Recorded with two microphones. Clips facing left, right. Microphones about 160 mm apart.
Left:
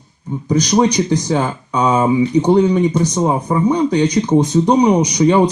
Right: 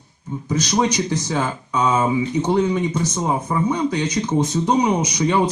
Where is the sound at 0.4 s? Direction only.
35° left (ahead or behind).